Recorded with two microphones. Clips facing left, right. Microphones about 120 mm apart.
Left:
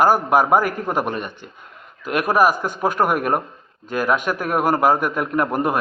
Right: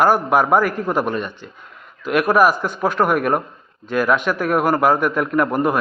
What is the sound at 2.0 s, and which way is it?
A man's voice, 45° left (ahead or behind).